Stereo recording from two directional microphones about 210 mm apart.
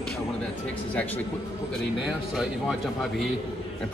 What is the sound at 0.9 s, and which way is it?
Speech, 10° left (ahead or behind).